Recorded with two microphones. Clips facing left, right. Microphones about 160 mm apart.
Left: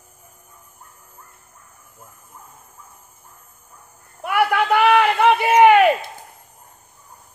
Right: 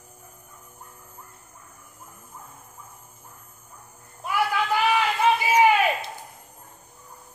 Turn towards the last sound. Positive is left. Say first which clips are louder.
# left 8 dB
turn(degrees=65)  # may be behind; listen again after turning